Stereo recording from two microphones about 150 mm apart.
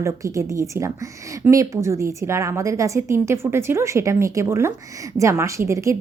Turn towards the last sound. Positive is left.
turn(degrees=-20)  # may be behind; listen again after turning